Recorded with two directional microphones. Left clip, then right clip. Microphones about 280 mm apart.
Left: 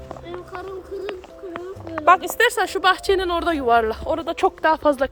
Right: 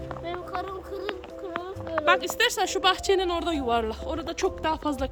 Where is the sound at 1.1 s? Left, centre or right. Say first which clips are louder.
Left 1 dB; left.